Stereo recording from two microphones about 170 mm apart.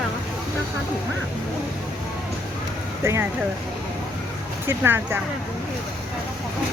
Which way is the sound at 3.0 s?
15° right (ahead or behind).